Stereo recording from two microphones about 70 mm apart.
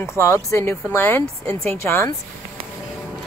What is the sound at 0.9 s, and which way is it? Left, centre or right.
Speech, left.